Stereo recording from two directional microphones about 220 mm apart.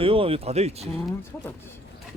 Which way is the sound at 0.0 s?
25° right (ahead or behind).